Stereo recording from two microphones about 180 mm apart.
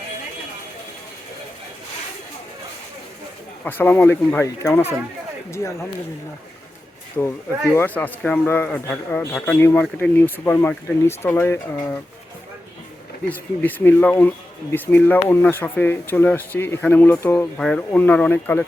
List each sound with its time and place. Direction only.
3.6 s speech: 10° left (ahead or behind)
7.2 s speech: 5° left (ahead or behind)
13.2 s speech: 10° left (ahead or behind)